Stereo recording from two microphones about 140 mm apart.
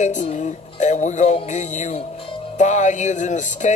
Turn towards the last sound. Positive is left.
turn(degrees=60)  # may be behind; listen again after turning